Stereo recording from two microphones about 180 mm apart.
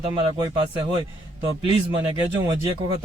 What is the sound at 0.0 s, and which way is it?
Speech, 25° right (ahead or behind).